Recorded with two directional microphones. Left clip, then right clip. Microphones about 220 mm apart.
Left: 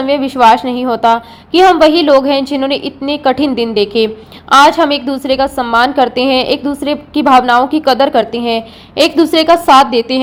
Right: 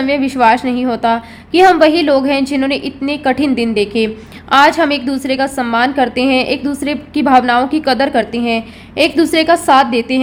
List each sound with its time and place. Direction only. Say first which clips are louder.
0.0 s a woman's voice: left 3 dB; centre (ahead or behind)